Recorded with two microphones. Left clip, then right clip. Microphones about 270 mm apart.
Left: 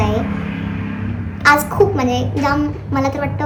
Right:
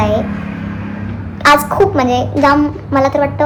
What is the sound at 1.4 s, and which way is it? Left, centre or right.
A woman's voice, centre.